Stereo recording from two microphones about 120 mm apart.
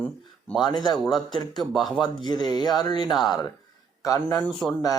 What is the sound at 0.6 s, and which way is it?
Speech, 35° left (ahead or behind).